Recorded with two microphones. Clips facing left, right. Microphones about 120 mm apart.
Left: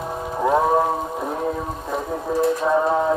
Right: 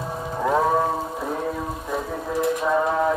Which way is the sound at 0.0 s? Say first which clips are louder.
Left 3 dB; 15° left (ahead or behind).